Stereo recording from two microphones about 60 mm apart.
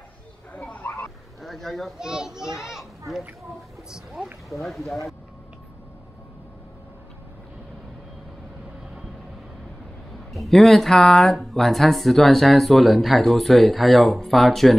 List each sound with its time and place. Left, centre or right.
0.7 s a sound: left
1.4 s speech: centre
2.0 s a child's voice: centre
4.6 s speech: centre
10.3 s a sound: centre
10.6 s speech: centre